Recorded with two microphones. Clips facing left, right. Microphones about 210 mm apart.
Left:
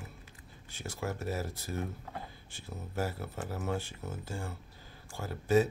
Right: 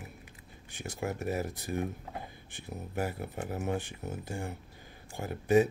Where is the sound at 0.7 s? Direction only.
15° right (ahead or behind).